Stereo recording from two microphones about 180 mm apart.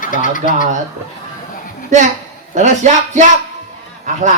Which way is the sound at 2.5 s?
40° right (ahead or behind).